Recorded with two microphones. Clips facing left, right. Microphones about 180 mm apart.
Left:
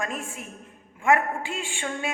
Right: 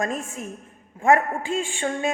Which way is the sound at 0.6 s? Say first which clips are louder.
Right 3 dB; 40° right (ahead or behind).